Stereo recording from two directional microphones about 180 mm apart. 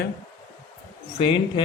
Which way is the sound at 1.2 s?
35° left (ahead or behind).